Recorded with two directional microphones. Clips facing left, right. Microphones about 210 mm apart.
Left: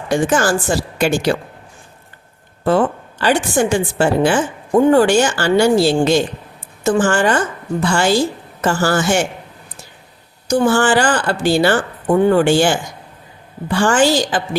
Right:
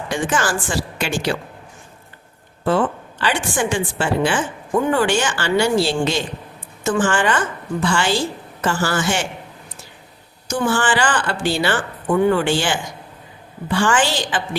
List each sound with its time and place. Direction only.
0.1 s a woman's voice: 40° left (ahead or behind)
2.6 s a woman's voice: 40° left (ahead or behind)
10.5 s a woman's voice: 40° left (ahead or behind)